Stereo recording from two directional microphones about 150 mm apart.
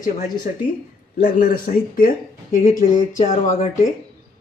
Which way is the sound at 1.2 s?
75° left (ahead or behind).